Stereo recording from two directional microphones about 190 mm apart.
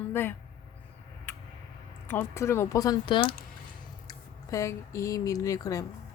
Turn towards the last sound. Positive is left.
turn(degrees=15)  # may be behind; listen again after turning